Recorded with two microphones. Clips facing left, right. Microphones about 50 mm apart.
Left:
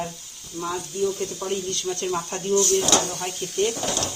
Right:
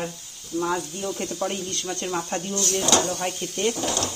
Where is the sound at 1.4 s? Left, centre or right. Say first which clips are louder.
Even; right.